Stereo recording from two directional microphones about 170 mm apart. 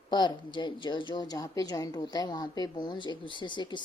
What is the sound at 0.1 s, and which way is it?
A woman's voice, 25° left (ahead or behind).